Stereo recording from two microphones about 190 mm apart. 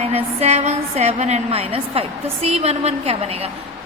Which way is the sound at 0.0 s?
35° right (ahead or behind).